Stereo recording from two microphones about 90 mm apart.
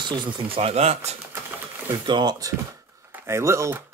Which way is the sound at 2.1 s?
60° right (ahead or behind).